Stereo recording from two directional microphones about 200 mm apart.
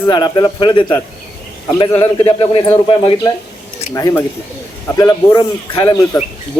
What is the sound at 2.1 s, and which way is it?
A man's voice, 20° left (ahead or behind).